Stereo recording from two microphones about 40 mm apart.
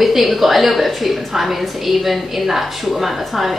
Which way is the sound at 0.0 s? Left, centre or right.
Centre.